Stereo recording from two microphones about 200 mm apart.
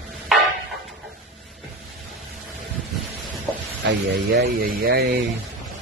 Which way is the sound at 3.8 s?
60° right (ahead or behind).